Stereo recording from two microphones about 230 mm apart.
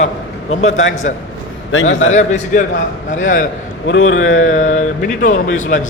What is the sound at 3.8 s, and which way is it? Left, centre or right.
Speech, left.